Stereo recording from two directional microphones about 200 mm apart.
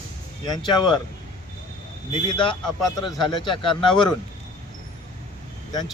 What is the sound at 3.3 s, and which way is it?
Speech, 25° left (ahead or behind).